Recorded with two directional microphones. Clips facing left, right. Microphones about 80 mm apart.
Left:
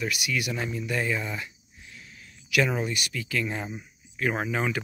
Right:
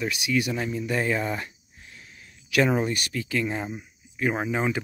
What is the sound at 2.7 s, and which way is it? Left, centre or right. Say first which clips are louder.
Speech: right 4 dB; right.